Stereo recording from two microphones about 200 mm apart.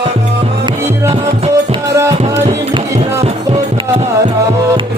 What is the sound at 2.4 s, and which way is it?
Music, 30° right (ahead or behind).